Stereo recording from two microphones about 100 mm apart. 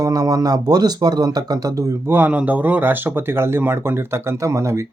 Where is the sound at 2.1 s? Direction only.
20° right (ahead or behind).